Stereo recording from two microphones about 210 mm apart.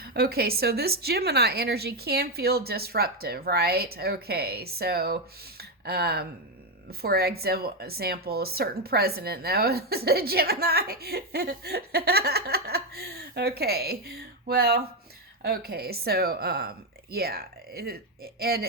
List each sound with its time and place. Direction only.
0.0 s speech: 45° right (ahead or behind)